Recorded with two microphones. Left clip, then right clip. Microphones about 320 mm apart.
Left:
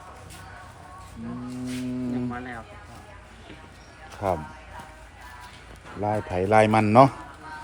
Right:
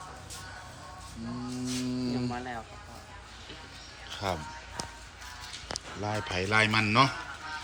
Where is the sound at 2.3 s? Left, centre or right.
Centre.